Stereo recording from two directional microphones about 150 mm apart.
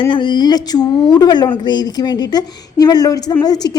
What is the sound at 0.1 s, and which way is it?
A woman's voice, 30° left (ahead or behind).